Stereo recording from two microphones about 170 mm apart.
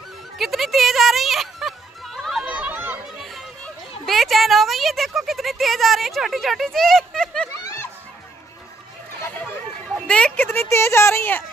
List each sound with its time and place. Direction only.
0.4 s music: centre (ahead or behind)
4.0 s speech: centre (ahead or behind)
7.6 s music: 15° left (ahead or behind)
9.2 s chatter: 10° left (ahead or behind)
9.9 s speech: 5° left (ahead or behind)